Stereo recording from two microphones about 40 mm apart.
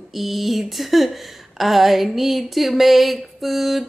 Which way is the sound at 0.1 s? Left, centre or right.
Centre.